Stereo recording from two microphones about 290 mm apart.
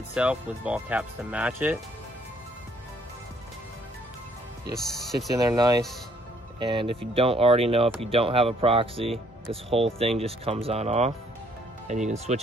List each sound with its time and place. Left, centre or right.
0.1 s speech: centre
4.7 s speech: centre
5.4 s speech: centre